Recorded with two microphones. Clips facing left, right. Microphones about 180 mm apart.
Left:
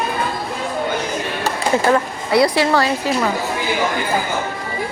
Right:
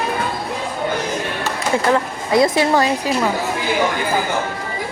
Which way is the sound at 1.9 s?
20° right (ahead or behind).